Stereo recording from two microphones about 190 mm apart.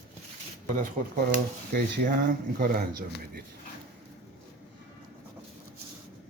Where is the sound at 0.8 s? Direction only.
45° right (ahead or behind).